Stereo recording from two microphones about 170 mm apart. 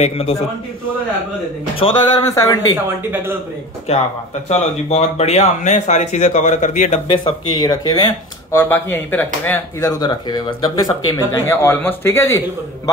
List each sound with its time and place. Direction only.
1.8 s speech: 20° left (ahead or behind)
2.7 s speech: 15° right (ahead or behind)
3.9 s speech: 35° left (ahead or behind)
7.1 s speech: 25° left (ahead or behind)
8.5 s speech: 10° left (ahead or behind)